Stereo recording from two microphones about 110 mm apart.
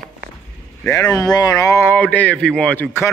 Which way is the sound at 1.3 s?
35° left (ahead or behind).